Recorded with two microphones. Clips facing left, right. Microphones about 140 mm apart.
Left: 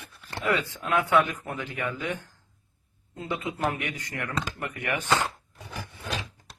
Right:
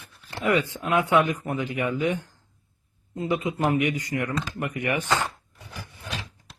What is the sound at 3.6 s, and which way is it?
Speech, 10° right (ahead or behind).